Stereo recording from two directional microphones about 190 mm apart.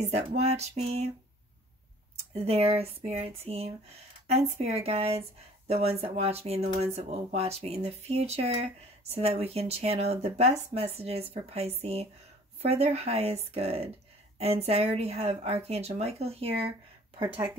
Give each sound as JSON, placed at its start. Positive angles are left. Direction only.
{"t": 0.1, "sound": "speech", "side_deg": -35}
{"t": 2.3, "sound": "speech", "side_deg": -30}